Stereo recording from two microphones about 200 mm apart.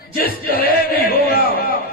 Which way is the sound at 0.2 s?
45° left (ahead or behind).